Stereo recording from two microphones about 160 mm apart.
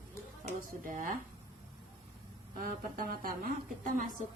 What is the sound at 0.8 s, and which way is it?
Speech, 60° right (ahead or behind).